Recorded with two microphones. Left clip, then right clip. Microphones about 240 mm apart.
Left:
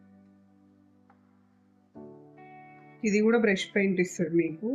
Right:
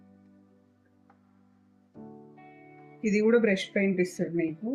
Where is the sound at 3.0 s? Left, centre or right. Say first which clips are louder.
Right 1 dB; left.